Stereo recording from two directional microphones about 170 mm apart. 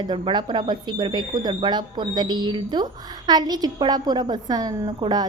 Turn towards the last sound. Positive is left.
turn(degrees=-25)  # may be behind; listen again after turning